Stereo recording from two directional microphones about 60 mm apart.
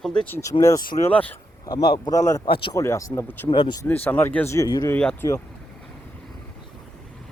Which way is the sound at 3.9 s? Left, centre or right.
Left.